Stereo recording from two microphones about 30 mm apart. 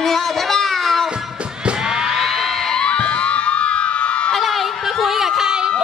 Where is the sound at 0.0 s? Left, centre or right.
Centre.